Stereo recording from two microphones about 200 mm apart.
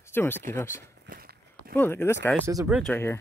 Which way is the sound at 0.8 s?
50° right (ahead or behind).